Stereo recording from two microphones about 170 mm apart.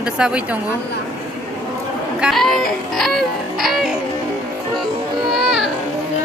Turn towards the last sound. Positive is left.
turn(degrees=0)  # may be behind; listen again after turning